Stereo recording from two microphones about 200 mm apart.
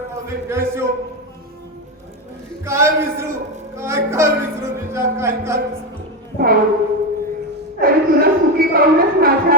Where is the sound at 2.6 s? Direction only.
15° right (ahead or behind).